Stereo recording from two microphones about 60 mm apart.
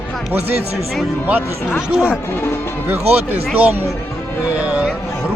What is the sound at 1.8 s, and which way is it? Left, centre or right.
Speech, centre.